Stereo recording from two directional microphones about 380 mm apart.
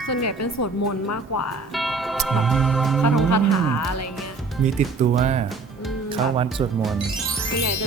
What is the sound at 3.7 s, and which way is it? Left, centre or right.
Speech, left.